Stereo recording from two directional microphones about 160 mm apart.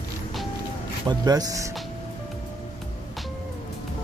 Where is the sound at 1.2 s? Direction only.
25° right (ahead or behind).